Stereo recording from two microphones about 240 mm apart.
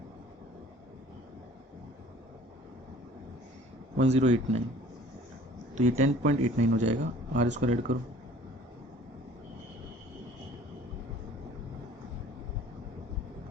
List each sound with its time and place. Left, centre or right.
4.0 s speech: right
5.7 s speech: right